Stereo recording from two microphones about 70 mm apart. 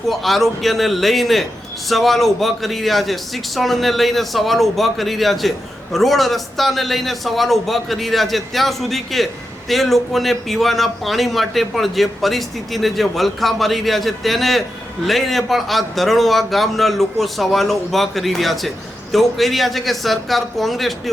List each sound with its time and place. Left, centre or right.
0.1 s a man's voice: centre